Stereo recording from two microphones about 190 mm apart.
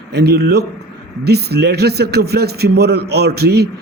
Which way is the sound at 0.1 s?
60° right (ahead or behind).